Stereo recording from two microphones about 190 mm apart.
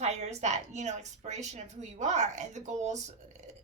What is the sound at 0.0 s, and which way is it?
A woman's voice, 35° right (ahead or behind).